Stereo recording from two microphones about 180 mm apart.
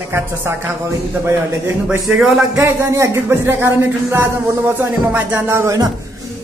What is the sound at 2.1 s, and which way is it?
Speech, centre (ahead or behind).